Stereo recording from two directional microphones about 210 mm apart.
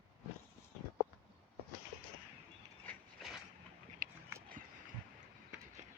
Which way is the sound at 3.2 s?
Centre (ahead or behind).